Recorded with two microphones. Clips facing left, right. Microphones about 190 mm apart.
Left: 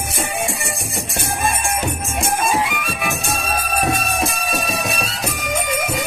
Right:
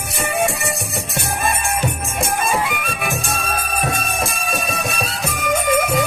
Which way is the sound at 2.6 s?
55° right (ahead or behind).